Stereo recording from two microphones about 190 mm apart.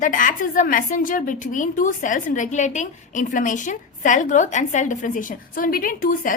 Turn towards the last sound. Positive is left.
turn(degrees=45)  # may be behind; listen again after turning